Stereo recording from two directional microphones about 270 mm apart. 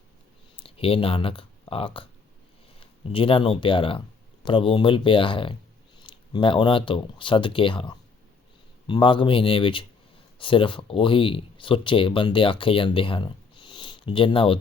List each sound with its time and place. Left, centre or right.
0.5 s speech: centre